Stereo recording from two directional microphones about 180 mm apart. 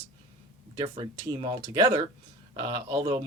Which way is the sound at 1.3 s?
30° right (ahead or behind).